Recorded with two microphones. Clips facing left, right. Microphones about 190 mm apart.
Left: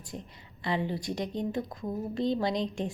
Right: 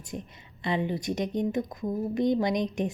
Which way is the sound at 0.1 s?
20° right (ahead or behind).